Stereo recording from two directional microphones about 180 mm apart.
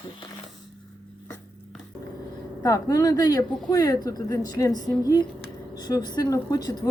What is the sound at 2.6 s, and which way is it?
Speech, 20° left (ahead or behind).